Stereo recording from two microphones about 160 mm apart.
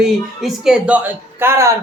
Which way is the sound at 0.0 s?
5° right (ahead or behind).